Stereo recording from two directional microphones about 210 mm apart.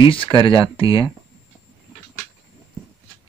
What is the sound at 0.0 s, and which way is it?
Speech, 25° left (ahead or behind).